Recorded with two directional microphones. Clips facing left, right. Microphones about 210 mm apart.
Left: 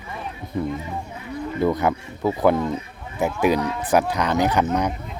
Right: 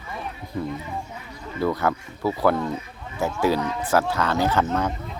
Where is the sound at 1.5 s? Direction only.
20° left (ahead or behind).